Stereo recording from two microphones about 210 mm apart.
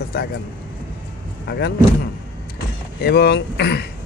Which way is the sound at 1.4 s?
50° left (ahead or behind).